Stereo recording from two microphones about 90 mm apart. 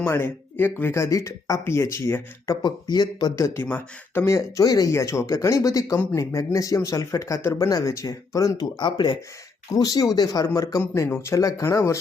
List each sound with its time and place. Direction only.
0.0 s speech: 25° left (ahead or behind)
2.6 s speech: 50° left (ahead or behind)
3.3 s speech: 30° left (ahead or behind)
4.9 s speech: 35° left (ahead or behind)
8.8 s speech: 60° left (ahead or behind)
9.7 s speech: 45° left (ahead or behind)